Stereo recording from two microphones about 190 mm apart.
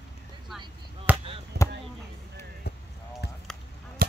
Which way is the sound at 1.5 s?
60° right (ahead or behind).